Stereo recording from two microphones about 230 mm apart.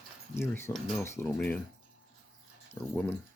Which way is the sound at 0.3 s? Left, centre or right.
Centre.